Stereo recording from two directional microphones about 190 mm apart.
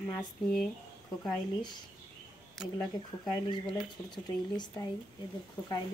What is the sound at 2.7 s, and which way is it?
Speech, centre (ahead or behind).